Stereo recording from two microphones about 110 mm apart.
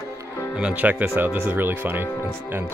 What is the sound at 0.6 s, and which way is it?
Speech, 10° right (ahead or behind).